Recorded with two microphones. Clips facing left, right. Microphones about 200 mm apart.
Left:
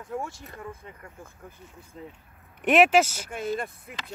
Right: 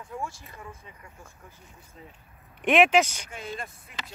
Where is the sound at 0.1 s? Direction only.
55° left (ahead or behind).